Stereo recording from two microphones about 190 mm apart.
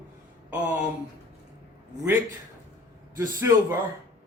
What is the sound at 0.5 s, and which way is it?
Speech, 5° right (ahead or behind).